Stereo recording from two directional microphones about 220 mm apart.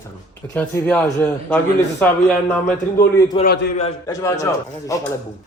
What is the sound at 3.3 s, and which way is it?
A man's voice, 20° left (ahead or behind).